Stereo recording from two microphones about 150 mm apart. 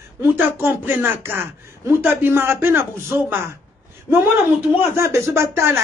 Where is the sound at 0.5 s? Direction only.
15° right (ahead or behind).